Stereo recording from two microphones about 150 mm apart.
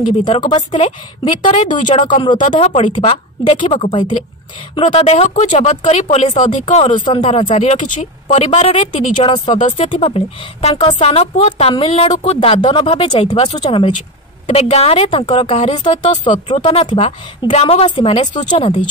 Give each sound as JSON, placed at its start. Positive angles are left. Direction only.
{"t": 0.3, "sound": "speech", "side_deg": 30}
{"t": 1.9, "sound": "speech", "side_deg": 60}
{"t": 2.8, "sound": "a woman's voice", "side_deg": 35}
{"t": 7.1, "sound": "a woman's voice", "side_deg": 35}
{"t": 16.4, "sound": "speech", "side_deg": 40}
{"t": 18.4, "sound": "speech", "side_deg": 30}